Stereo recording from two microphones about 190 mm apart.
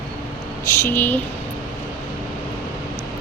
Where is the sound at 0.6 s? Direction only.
15° left (ahead or behind).